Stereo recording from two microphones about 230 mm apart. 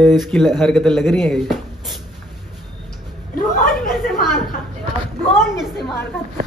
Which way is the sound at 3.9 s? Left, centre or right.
Centre.